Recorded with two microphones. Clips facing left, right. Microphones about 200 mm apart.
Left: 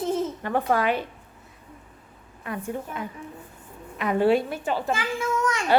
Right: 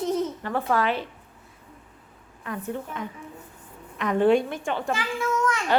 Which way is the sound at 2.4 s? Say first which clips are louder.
Left 1 dB; 10° left (ahead or behind).